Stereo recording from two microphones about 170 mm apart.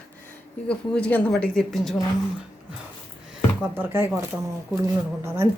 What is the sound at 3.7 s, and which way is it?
Speech, 10° right (ahead or behind).